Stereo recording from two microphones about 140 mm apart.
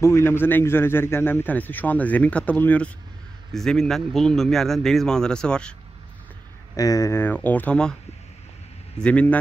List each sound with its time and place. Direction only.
0.0 s a man's voice: 20° left (ahead or behind)
6.8 s a man's voice: 25° left (ahead or behind)
9.0 s a man's voice: 10° left (ahead or behind)